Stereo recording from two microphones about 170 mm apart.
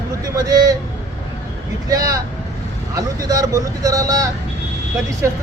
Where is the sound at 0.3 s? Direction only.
20° right (ahead or behind).